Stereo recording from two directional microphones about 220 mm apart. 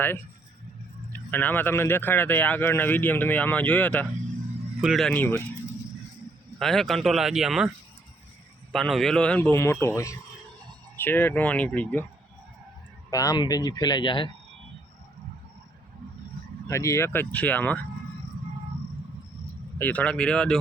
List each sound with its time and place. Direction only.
1.1 s speech: 10° left (ahead or behind)
6.6 s speech: centre (ahead or behind)
8.7 s speech: centre (ahead or behind)
13.1 s speech: 15° left (ahead or behind)
16.6 s speech: 15° left (ahead or behind)
19.8 s speech: 5° left (ahead or behind)